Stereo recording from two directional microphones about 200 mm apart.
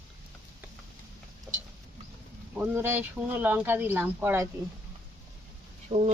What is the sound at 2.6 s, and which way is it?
Speech, 10° right (ahead or behind).